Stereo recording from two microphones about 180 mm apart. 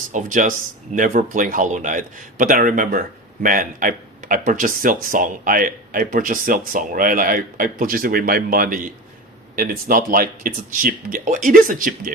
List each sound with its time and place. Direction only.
0.1 s speech: 45° right (ahead or behind)